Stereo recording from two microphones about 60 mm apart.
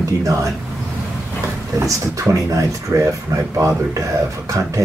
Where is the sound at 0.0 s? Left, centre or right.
Right.